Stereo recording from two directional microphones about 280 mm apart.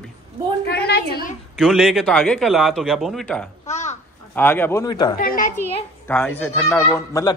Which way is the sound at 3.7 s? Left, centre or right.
Left.